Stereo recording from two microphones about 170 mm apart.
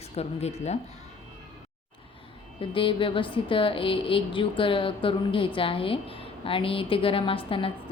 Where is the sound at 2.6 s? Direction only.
30° left (ahead or behind).